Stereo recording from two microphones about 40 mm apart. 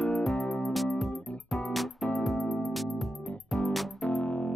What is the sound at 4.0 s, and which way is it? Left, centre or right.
Music, left.